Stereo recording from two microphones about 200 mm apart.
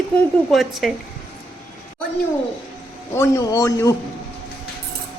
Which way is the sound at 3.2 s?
15° left (ahead or behind).